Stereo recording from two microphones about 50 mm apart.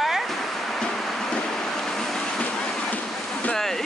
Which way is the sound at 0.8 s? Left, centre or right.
Centre.